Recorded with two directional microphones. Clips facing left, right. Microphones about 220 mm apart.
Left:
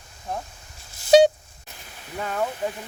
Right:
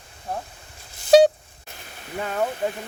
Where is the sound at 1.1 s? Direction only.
Centre (ahead or behind).